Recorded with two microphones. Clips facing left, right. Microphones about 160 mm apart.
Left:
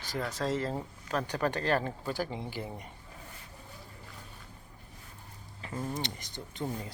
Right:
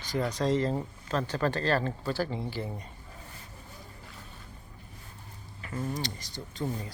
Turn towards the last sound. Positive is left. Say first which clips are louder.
# right 2 dB
turn(degrees=20)  # may be behind; listen again after turning